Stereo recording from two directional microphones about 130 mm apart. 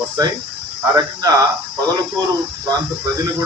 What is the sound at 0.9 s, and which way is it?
Speech, 30° right (ahead or behind).